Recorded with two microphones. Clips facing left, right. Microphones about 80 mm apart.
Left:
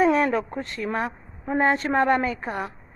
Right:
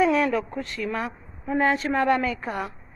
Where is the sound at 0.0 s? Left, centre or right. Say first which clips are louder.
Left 1 dB; left.